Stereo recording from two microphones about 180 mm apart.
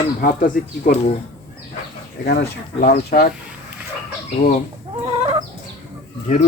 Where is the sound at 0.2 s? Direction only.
50° left (ahead or behind).